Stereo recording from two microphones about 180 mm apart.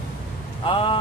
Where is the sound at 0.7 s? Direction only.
30° left (ahead or behind).